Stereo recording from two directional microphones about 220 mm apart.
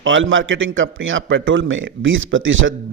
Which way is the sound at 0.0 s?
60° right (ahead or behind).